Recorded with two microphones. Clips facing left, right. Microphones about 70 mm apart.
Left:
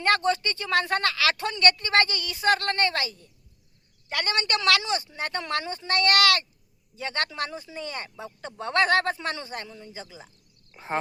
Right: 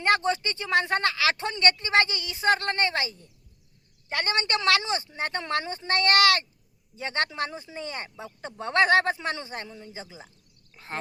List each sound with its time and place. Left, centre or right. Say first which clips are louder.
0.0 s speech: left 1 dB; right
10.8 s speech: left 5 dB; centre